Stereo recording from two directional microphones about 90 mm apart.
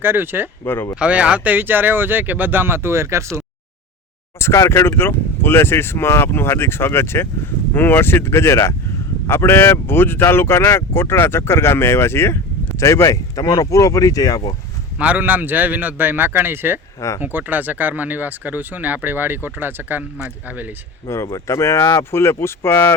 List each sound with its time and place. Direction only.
0.0 s speech: 25° right (ahead or behind)
0.6 s speech: 25° left (ahead or behind)
0.9 s speech: 15° right (ahead or behind); by 3.2 s 30° right (ahead or behind)
4.4 s speech: 30° left (ahead or behind)
14.9 s speech: 15° right (ahead or behind)
21.1 s speech: 35° left (ahead or behind)